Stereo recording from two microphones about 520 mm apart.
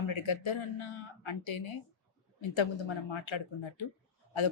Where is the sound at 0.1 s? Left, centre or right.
Left.